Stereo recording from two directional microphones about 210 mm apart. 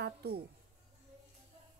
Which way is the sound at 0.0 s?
50° right (ahead or behind).